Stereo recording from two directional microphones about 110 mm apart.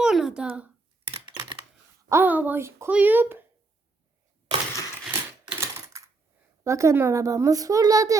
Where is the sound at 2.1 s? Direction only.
20° right (ahead or behind).